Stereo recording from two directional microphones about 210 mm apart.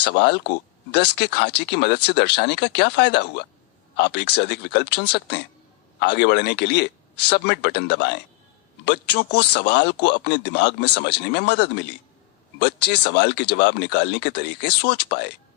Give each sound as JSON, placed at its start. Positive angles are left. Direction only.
{"t": 0.0, "sound": "speech", "side_deg": 50}